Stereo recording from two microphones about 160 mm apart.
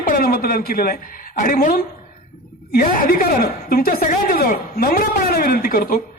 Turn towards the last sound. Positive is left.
turn(degrees=65)  # may be behind; listen again after turning